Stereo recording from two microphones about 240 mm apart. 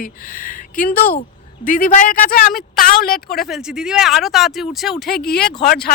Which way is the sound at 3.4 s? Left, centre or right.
Centre.